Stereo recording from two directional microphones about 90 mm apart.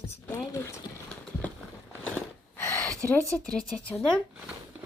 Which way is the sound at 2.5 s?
30° left (ahead or behind).